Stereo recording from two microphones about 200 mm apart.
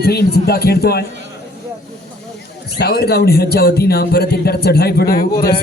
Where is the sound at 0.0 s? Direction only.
50° left (ahead or behind).